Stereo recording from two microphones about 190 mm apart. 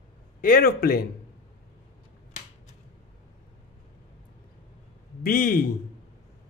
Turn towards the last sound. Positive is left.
turn(degrees=45)  # may be behind; listen again after turning